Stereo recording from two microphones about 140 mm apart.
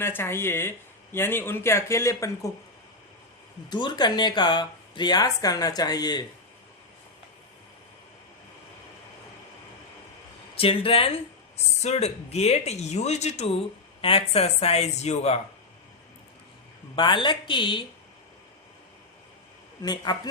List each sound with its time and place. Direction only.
0.0 s speech: 15° left (ahead or behind)
3.7 s speech: 30° left (ahead or behind)
10.6 s speech: 40° left (ahead or behind)
16.9 s speech: 35° left (ahead or behind)
19.8 s speech: 30° left (ahead or behind)